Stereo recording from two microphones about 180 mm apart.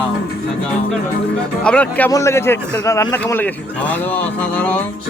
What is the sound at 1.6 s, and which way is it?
Speech, 5° left (ahead or behind).